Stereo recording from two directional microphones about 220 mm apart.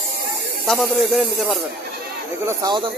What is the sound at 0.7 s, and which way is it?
Speech, centre (ahead or behind).